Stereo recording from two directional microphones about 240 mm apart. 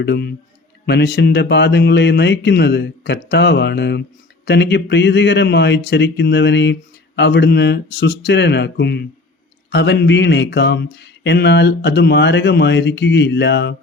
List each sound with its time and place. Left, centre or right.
0.0 s speech: left